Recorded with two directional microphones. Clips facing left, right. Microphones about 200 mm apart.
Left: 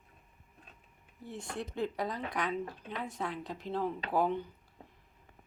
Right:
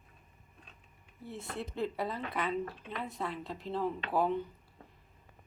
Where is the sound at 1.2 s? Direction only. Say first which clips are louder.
Even; centre (ahead or behind).